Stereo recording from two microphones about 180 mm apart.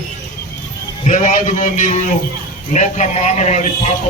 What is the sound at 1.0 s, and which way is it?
A man's voice, 45° left (ahead or behind).